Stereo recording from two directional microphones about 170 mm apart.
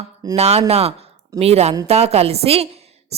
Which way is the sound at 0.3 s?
40° right (ahead or behind).